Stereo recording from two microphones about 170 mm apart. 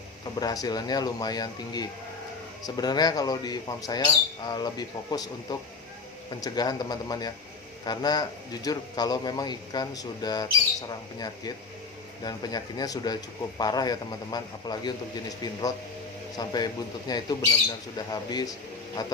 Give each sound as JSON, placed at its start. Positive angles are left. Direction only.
{"t": 0.3, "sound": "a man's voice", "side_deg": 20}
{"t": 16.4, "sound": "a man's voice", "side_deg": 25}